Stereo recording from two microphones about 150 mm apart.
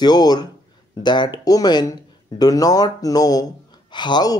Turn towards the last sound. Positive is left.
turn(degrees=30)  # may be behind; listen again after turning